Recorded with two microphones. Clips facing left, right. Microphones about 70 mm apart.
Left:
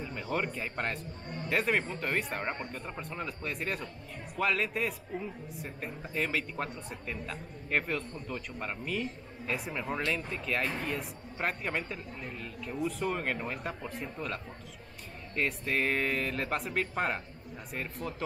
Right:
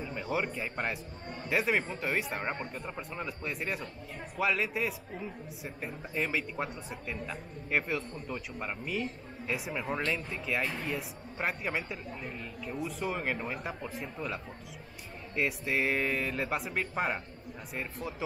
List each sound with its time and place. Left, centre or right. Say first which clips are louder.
0.0 s speech: right 1 dB; centre